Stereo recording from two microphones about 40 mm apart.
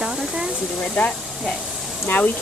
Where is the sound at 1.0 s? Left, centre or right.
Left.